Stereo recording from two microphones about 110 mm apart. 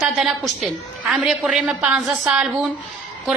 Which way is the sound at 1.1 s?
5° right (ahead or behind).